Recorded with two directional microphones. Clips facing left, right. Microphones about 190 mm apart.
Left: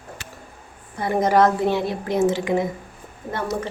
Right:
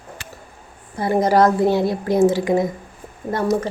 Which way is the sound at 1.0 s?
35° right (ahead or behind).